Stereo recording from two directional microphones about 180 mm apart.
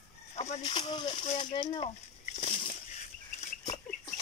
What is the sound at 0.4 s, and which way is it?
Speech, 35° left (ahead or behind).